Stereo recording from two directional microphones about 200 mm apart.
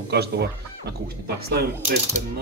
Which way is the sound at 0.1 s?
55° right (ahead or behind).